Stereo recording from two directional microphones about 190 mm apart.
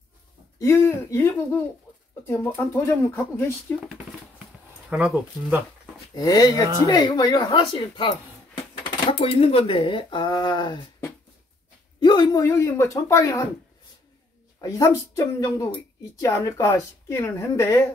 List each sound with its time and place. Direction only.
0.6 s speech: 15° left (ahead or behind)
4.8 s speech: 5° right (ahead or behind)
6.1 s speech: 20° left (ahead or behind)
14.6 s speech: 15° left (ahead or behind)